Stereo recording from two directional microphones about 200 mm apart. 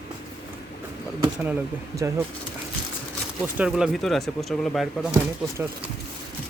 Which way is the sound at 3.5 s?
5° right (ahead or behind).